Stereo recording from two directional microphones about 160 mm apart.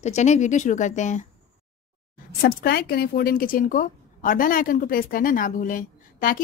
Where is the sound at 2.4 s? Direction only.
75° left (ahead or behind).